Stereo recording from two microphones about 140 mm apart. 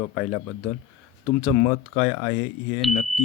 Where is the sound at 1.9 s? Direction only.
10° left (ahead or behind).